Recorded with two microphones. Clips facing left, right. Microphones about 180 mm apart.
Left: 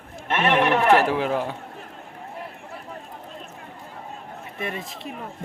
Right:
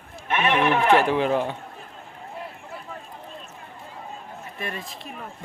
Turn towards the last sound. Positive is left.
turn(degrees=20)  # may be behind; listen again after turning